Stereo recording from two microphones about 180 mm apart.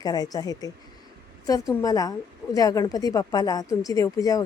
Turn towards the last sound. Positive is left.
turn(degrees=20)  # may be behind; listen again after turning